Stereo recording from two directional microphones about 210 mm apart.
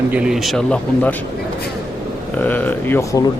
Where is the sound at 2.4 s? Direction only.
10° left (ahead or behind).